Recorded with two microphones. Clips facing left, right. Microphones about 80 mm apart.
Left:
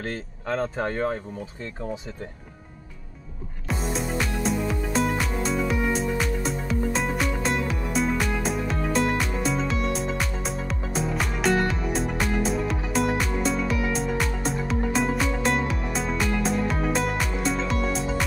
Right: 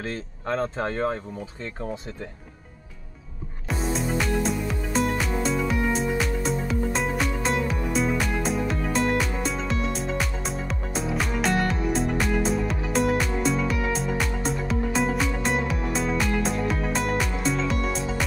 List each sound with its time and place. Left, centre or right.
0.5 s speech: right
3.6 s music: centre